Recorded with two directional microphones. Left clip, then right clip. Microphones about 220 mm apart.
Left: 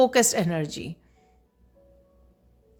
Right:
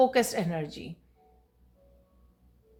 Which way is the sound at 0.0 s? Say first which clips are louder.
Left 4 dB; 45° left (ahead or behind).